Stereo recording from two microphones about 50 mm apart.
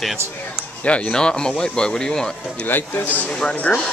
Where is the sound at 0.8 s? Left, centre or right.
Left.